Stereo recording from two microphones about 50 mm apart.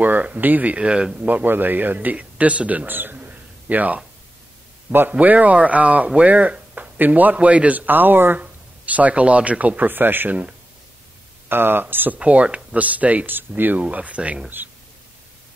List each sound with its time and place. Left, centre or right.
0.0 s speech: right
0.7 s speech: centre
1.2 s speech: right
2.9 s a sound: right
5.1 s speech: right
8.8 s speech: right
11.4 s speech: right
12.2 s speech: right
13.8 s speech: right